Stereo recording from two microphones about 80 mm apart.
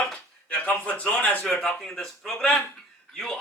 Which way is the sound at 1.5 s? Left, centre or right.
Centre.